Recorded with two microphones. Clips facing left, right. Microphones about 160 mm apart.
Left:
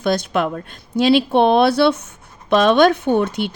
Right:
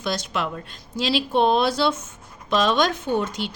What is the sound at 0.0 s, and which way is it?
Speech, 55° left (ahead or behind).